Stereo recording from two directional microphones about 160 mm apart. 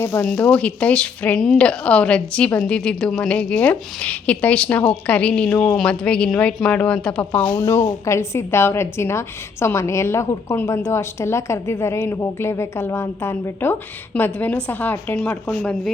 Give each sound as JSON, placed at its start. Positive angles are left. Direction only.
{"t": 0.0, "sound": "speech", "side_deg": 15}